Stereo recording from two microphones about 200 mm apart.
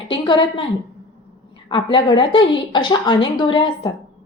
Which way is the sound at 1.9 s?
25° left (ahead or behind).